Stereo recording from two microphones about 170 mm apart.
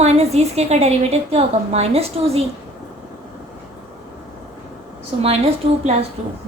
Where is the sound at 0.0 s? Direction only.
40° right (ahead or behind).